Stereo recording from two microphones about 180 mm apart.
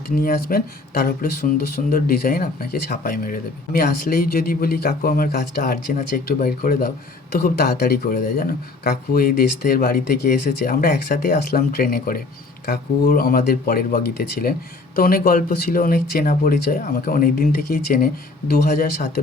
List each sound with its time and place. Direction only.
0.2 s speech: 55° left (ahead or behind)